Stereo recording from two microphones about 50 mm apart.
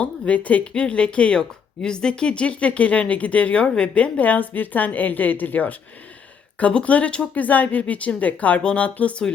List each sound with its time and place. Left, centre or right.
0.0 s speech: left
7.4 s speech: left